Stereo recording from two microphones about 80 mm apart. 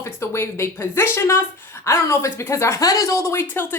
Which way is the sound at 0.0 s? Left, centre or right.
Left.